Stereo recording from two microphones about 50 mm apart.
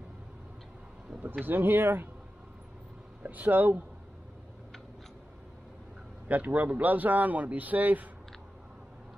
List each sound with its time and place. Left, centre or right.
1.4 s speech: right
3.2 s a man's voice: right
6.2 s a man's voice: right